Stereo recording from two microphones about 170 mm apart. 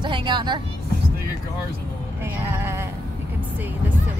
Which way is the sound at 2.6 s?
15° right (ahead or behind).